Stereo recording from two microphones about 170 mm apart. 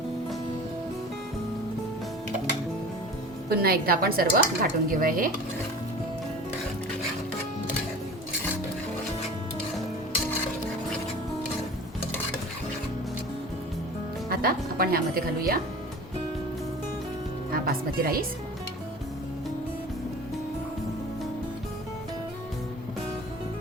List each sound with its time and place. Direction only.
3.5 s speech: 60° right (ahead or behind)
14.3 s speech: 60° right (ahead or behind)
17.5 s a woman's voice: 60° right (ahead or behind)